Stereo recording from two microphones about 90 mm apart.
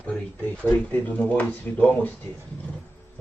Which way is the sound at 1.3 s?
15° left (ahead or behind).